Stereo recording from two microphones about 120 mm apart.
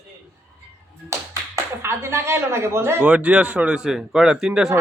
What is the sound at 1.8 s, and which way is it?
A man's voice, 20° right (ahead or behind).